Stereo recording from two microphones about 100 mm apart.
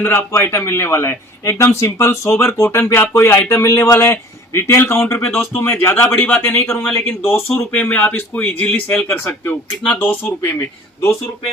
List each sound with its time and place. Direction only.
0.0 s speech: 20° left (ahead or behind)